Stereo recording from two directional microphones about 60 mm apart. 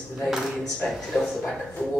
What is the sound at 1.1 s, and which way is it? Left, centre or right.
Speech, left.